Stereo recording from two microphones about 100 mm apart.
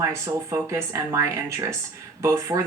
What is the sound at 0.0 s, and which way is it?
Speech, 30° right (ahead or behind).